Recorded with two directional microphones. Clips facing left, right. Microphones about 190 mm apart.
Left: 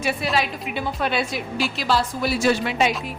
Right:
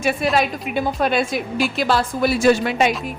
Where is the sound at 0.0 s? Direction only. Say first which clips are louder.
Right 4 dB; 50° right (ahead or behind).